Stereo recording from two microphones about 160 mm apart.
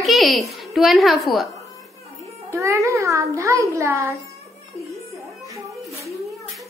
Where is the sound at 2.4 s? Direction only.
20° right (ahead or behind).